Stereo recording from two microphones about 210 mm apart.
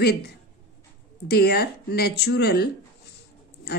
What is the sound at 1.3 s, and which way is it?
A woman's voice, 50° left (ahead or behind).